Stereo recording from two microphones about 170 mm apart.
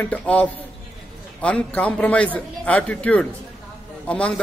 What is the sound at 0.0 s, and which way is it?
A man's voice, 10° left (ahead or behind).